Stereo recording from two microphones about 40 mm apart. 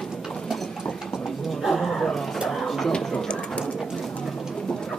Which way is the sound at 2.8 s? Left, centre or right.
Left.